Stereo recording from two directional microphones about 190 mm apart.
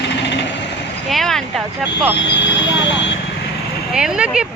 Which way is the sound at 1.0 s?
Centre (ahead or behind).